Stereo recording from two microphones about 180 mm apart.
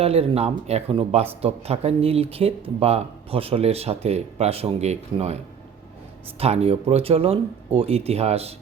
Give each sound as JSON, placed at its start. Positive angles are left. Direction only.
{"t": 0.0, "sound": "speech", "side_deg": -35}
{"t": 6.4, "sound": "speech", "side_deg": -35}